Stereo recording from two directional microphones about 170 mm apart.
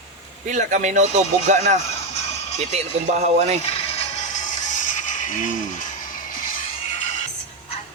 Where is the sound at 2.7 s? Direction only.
40° right (ahead or behind).